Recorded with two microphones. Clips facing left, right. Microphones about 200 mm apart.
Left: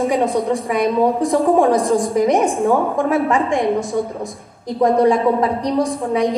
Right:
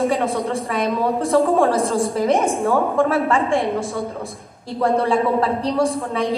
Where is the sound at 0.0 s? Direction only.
15° left (ahead or behind).